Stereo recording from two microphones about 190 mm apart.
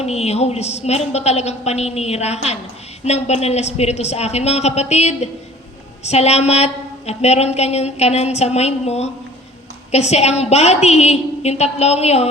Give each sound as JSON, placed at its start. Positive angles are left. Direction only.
{"t": 0.0, "sound": "a woman's voice", "side_deg": 35}